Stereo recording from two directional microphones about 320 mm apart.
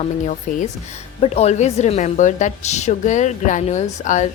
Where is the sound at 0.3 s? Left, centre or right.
Left.